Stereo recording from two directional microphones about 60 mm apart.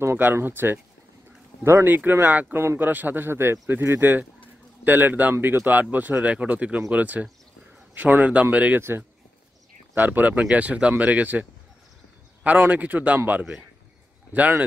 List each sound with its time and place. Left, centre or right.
0.2 s speech: right
1.6 s speech: right
1.9 s speech: right
2.5 s speech: right
9.9 s speech: right
12.4 s speech: right